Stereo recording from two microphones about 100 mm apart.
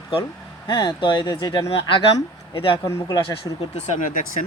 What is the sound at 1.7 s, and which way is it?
Speech, 65° left (ahead or behind).